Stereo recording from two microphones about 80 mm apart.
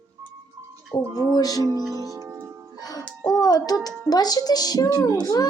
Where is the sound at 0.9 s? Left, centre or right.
Left.